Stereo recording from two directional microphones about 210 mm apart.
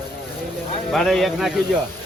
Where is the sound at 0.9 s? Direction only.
Centre (ahead or behind).